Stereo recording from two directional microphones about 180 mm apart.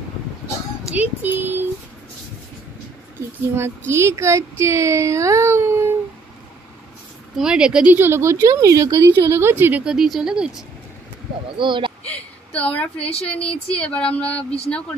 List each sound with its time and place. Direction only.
0.9 s a woman's voice: 10° right (ahead or behind)
3.5 s a woman's voice: 15° right (ahead or behind)
7.3 s a woman's voice: 5° right (ahead or behind)
11.4 s speech: 25° right (ahead or behind)
12.0 s a sound: 5° left (ahead or behind)
13.3 s speech: 5° left (ahead or behind)